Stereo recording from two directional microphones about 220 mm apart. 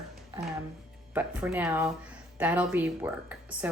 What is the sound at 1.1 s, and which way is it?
Speech, 5° right (ahead or behind).